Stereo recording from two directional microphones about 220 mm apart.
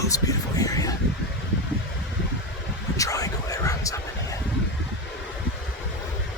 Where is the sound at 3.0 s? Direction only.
15° left (ahead or behind).